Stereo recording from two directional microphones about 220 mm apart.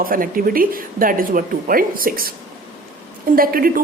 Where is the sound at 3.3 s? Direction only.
40° right (ahead or behind).